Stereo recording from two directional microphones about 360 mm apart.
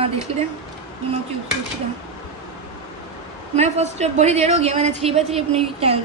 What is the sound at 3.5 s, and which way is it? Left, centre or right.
A woman's voice, centre.